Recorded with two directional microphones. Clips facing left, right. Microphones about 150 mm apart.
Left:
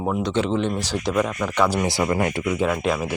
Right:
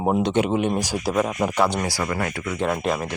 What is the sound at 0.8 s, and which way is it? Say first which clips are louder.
Speech: even; 10° right (ahead or behind).